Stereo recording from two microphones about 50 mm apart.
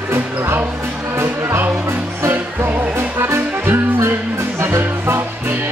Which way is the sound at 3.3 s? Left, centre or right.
Right.